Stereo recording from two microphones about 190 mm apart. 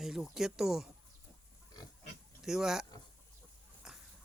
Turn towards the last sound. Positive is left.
turn(degrees=-5)  # may be behind; listen again after turning